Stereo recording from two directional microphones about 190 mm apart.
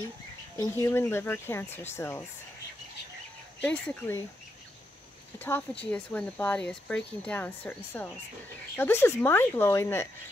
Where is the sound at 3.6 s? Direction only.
10° left (ahead or behind).